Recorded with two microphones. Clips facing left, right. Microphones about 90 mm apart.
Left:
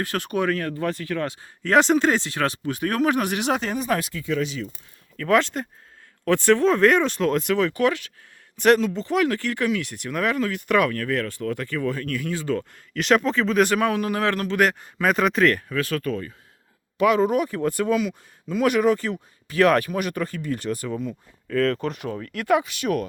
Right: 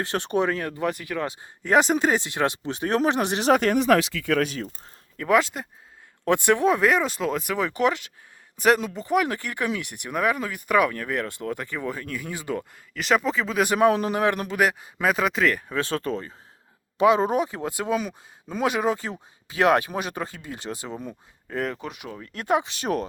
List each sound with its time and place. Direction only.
0.0 s speech: 25° right (ahead or behind)
3.6 s speech: 70° right (ahead or behind); by 4.7 s 45° right (ahead or behind)
5.3 s speech: 5° right (ahead or behind)
6.2 s speech: 15° right (ahead or behind)
7.6 s speech: 20° right (ahead or behind)
8.6 s speech: 5° right (ahead or behind)
13.0 s speech: centre (ahead or behind)
13.7 s speech: 20° right (ahead or behind); by 15.6 s centre (ahead or behind)
15.7 s speech: 25° right (ahead or behind)
17.9 s speech: 40° right (ahead or behind)
18.6 s speech: 20° right (ahead or behind)
22.2 s speech: 25° right (ahead or behind)